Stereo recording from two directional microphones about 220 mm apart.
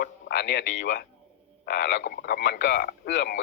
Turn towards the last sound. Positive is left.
turn(degrees=50)  # may be behind; listen again after turning